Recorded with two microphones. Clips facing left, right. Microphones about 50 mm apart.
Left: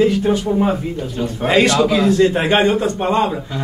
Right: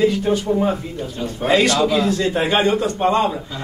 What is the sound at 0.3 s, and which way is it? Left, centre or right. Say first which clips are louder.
A man's voice: left 2 dB; left.